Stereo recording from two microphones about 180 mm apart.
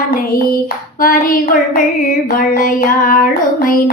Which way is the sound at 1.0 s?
50° left (ahead or behind).